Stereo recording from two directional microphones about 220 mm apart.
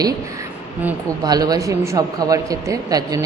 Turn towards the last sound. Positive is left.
turn(degrees=-15)  # may be behind; listen again after turning